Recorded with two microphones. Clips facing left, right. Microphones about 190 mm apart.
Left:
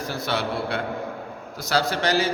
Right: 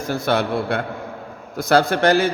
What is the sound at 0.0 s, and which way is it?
A man's voice, 50° right (ahead or behind).